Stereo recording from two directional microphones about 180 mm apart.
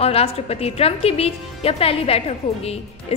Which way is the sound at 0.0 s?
35° left (ahead or behind).